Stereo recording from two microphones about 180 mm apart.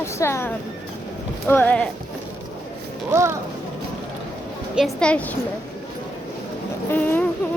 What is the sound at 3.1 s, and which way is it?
Speech, 15° right (ahead or behind).